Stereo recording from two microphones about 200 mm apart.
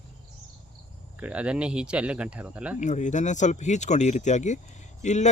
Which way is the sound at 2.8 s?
35° left (ahead or behind).